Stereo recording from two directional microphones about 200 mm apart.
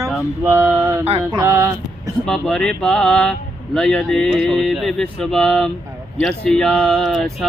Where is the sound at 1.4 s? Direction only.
10° right (ahead or behind).